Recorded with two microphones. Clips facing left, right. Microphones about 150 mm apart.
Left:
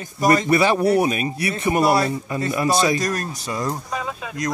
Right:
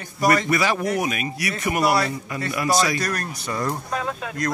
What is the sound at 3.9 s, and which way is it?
Speech, 5° left (ahead or behind).